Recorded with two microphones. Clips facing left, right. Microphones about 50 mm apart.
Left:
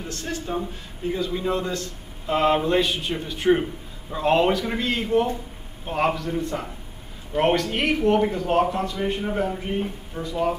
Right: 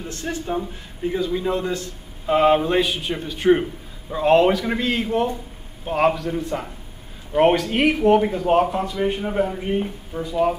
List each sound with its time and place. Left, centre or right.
0.1 s a man's voice: right
1.5 s a man's voice: right